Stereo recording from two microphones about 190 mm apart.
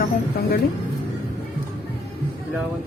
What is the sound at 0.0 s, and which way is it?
Music, 50° left (ahead or behind).